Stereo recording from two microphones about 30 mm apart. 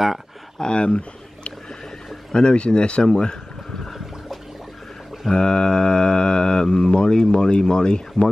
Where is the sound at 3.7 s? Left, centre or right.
Centre.